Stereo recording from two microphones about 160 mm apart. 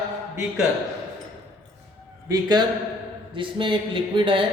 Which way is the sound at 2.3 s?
25° right (ahead or behind).